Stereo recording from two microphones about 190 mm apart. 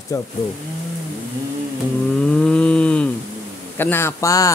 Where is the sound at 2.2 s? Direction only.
5° left (ahead or behind).